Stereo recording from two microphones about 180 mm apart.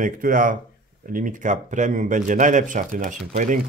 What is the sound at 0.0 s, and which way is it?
Speech, 45° right (ahead or behind).